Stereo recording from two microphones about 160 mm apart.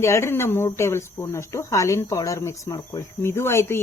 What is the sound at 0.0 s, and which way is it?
Speech, 15° left (ahead or behind).